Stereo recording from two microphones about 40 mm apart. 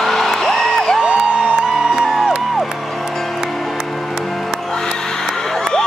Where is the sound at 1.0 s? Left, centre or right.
Right.